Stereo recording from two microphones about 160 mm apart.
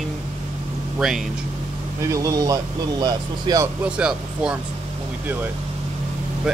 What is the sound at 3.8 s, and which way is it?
Speech, 5° right (ahead or behind).